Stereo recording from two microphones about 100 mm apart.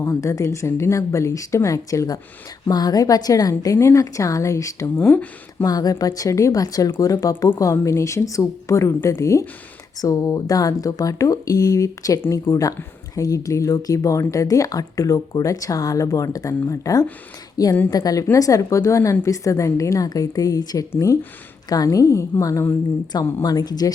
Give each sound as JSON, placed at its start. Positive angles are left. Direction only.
{"t": 0.0, "sound": "speech", "side_deg": 30}
{"t": 4.9, "sound": "speech", "side_deg": 15}
{"t": 5.6, "sound": "speech", "side_deg": 40}
{"t": 23.4, "sound": "speech", "side_deg": 40}